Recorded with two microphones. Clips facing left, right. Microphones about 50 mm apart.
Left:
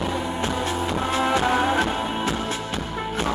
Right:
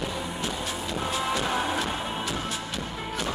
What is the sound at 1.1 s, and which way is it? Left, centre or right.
Music, left.